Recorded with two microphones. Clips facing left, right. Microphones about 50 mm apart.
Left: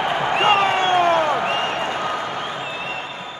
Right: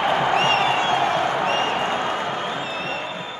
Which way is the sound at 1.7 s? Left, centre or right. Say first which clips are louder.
Even; right.